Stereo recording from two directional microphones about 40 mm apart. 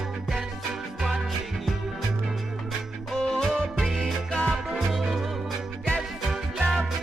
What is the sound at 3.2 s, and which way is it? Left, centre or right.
Music, centre.